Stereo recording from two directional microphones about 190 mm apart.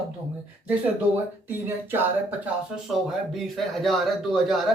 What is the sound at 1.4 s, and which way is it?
Speech, 10° right (ahead or behind).